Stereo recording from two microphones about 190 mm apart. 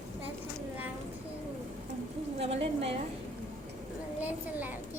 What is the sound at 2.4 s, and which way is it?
Speech, 30° right (ahead or behind).